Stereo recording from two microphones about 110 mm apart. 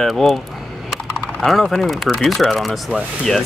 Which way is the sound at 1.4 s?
Centre (ahead or behind).